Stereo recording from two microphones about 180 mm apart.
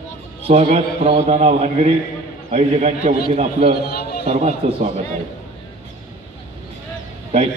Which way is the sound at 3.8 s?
60° left (ahead or behind).